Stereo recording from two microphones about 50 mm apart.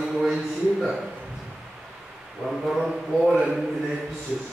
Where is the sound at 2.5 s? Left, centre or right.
Centre.